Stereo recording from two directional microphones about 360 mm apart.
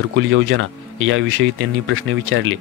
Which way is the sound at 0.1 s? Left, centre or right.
Right.